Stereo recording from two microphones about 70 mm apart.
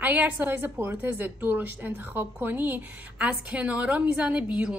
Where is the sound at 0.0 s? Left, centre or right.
Right.